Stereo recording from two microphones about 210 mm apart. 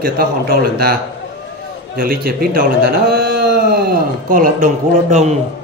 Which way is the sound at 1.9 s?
45° right (ahead or behind).